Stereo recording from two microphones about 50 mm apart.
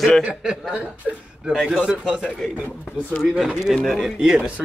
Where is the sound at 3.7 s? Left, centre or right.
Centre.